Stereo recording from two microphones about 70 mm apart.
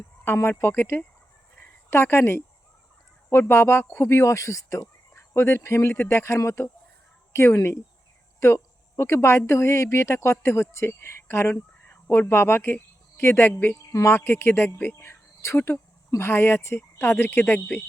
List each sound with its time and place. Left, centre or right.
0.3 s a woman's voice: left
1.5 s a sound: left
3.2 s a woman's voice: left